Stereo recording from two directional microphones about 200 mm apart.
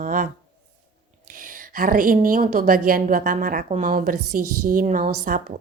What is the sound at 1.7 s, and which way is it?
A woman's voice, 45° right (ahead or behind).